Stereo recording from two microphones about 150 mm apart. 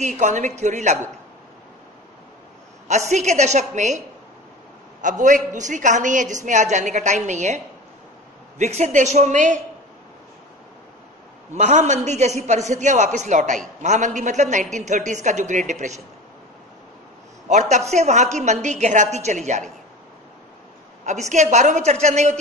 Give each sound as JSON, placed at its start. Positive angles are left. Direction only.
{"t": 0.0, "sound": "a man's voice", "side_deg": -55}
{"t": 2.9, "sound": "a man's voice", "side_deg": -50}
{"t": 5.0, "sound": "a woman's voice", "side_deg": -55}
{"t": 11.5, "sound": "a man's voice", "side_deg": -50}
{"t": 17.5, "sound": "a man's voice", "side_deg": -50}
{"t": 21.0, "sound": "a man's voice", "side_deg": -55}